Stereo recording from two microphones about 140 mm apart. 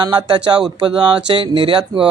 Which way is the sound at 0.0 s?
30° right (ahead or behind).